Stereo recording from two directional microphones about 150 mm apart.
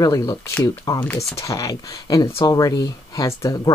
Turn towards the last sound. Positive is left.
turn(degrees=25)  # may be behind; listen again after turning